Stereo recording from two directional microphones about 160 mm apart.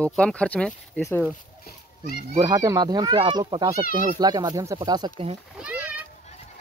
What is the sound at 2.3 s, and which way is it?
A child's voice, 25° right (ahead or behind).